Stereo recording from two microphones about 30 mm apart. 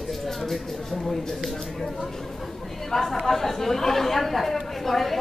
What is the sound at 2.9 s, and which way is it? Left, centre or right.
Speech, centre.